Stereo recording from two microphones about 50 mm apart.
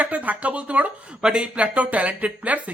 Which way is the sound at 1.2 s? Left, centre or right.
Centre.